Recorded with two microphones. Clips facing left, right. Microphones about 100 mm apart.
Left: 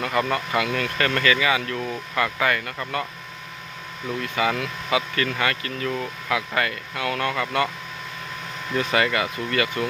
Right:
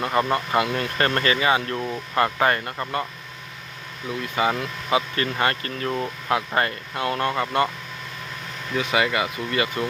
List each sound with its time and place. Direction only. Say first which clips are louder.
0.0 s speech: right 2 dB; 30° right (ahead or behind)
4.2 s speech: right 1 dB; 25° right (ahead or behind)
8.9 s speech: right 1 dB; 15° right (ahead or behind)